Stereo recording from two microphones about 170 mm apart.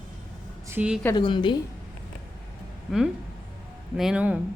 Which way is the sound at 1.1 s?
30° left (ahead or behind).